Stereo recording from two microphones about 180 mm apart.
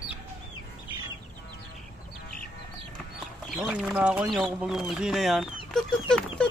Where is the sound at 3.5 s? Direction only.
5° right (ahead or behind).